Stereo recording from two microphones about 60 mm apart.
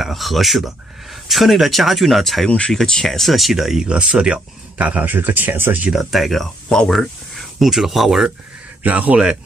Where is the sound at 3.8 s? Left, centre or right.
Centre; by 5.8 s right.